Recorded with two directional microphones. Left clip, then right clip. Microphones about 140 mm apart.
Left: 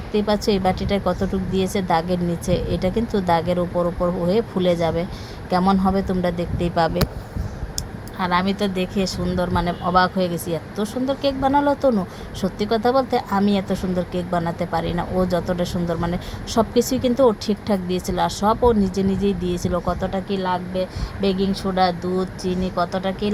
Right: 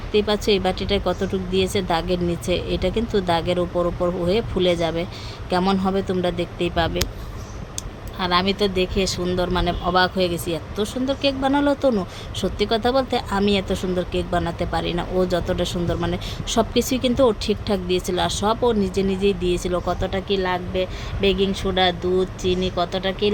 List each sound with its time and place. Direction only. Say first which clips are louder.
0.1 s speech: right 1 dB; centre (ahead or behind)
8.2 s speech: right 1 dB; 10° right (ahead or behind)